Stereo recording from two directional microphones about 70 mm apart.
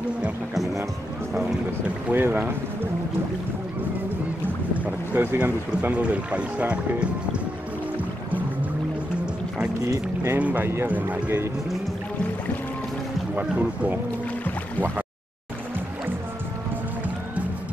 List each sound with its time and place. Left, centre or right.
2.0 s speech: right
4.7 s speech: right
5.2 s speech: right
5.7 s speech: centre
9.8 s speech: right
10.3 s speech: right
13.3 s speech: right